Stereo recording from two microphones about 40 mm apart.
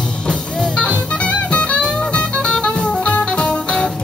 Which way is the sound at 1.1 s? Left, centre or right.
Left.